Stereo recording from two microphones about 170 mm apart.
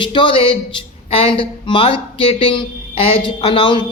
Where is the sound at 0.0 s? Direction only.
30° left (ahead or behind).